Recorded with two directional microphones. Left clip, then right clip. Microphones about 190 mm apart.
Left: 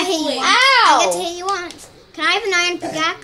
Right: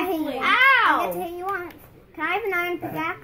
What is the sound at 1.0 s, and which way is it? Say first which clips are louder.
Speech: left 9 dB; 90° left.